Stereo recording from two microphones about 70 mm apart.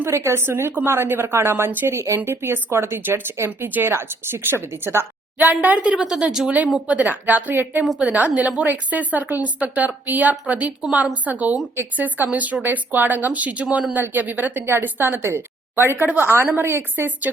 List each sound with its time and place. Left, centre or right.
0.0 s a woman's voice: right; by 6.5 s centre
6.8 s a woman's voice: centre